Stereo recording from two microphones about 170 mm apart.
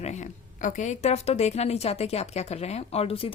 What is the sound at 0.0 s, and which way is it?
A woman's voice, 45° left (ahead or behind).